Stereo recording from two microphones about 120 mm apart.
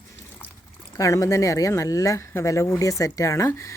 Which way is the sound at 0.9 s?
25° left (ahead or behind).